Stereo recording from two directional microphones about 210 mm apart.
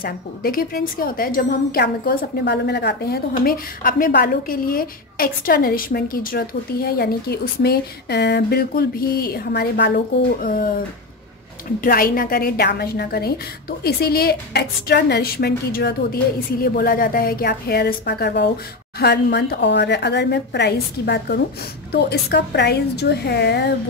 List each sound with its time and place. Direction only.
0.0 s a woman's voice: 45° left (ahead or behind)
11.8 s a woman's voice: 45° left (ahead or behind)